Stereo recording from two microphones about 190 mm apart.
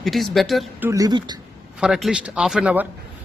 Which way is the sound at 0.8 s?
20° right (ahead or behind).